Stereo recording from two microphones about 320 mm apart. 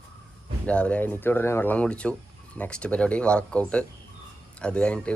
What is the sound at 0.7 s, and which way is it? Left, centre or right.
Speech, centre.